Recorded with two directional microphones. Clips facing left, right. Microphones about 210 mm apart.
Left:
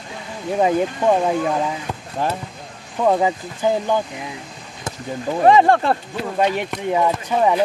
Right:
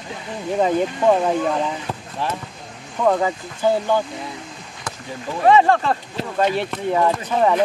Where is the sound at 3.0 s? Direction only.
15° left (ahead or behind).